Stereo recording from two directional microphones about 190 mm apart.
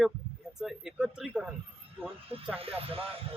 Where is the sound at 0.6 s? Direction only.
5° right (ahead or behind).